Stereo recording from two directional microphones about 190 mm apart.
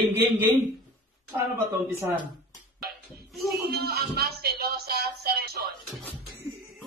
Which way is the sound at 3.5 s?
55° right (ahead or behind).